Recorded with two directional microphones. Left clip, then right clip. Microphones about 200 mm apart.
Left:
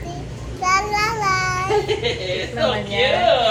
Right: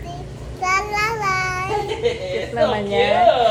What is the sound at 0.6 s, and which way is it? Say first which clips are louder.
Child singing: left 1 dB; 15° right (ahead or behind).